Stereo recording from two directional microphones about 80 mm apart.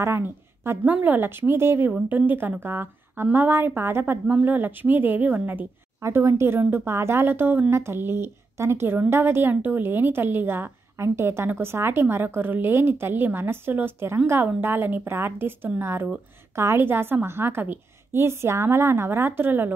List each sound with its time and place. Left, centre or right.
0.0 s a woman's voice: right
1.9 s a woman's voice: right
5.9 s a woman's voice: right